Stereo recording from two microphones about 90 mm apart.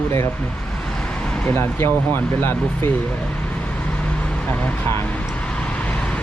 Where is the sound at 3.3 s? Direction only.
15° left (ahead or behind).